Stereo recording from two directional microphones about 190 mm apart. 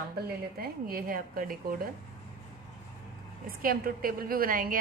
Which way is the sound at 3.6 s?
50° right (ahead or behind).